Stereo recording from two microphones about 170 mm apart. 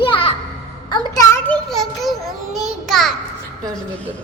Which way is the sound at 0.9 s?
20° left (ahead or behind).